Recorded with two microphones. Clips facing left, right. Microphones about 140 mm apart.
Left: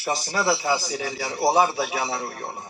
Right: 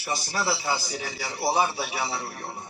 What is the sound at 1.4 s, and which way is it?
Speech, 35° left (ahead or behind).